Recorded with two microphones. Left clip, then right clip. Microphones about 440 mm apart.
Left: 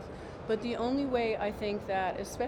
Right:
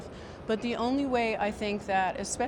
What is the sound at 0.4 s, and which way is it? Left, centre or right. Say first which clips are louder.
Speech: right 2 dB; right.